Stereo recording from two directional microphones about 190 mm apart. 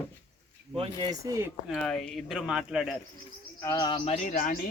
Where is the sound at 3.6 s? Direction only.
15° left (ahead or behind); by 4.5 s 40° left (ahead or behind).